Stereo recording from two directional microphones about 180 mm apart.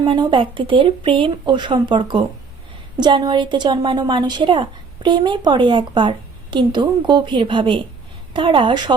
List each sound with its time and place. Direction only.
0.0 s a woman's voice: 25° right (ahead or behind)